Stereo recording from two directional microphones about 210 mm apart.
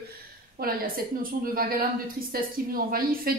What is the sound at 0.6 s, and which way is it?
Speech, 45° right (ahead or behind).